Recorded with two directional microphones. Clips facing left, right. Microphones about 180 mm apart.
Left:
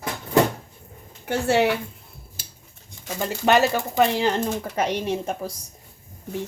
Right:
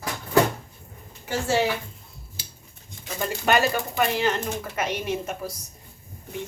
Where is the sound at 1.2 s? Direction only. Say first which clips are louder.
Left 3 dB; 60° left (ahead or behind).